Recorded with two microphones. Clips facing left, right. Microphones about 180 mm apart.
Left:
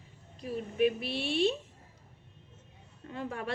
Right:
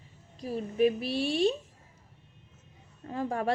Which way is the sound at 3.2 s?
40° right (ahead or behind).